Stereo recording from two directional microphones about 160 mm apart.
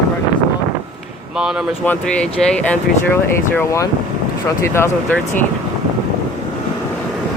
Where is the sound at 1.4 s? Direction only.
5° right (ahead or behind).